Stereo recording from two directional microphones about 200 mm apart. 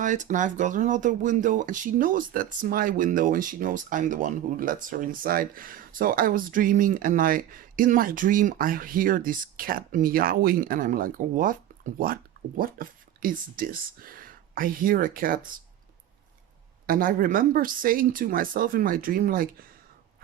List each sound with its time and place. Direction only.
0.0 s speech: 40° right (ahead or behind)
16.8 s speech: 45° right (ahead or behind)